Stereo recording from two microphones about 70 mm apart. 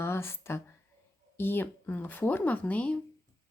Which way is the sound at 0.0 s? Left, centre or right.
Left.